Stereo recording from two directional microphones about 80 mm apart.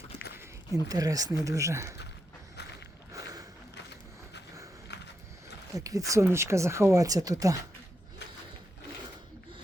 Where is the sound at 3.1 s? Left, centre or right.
Right.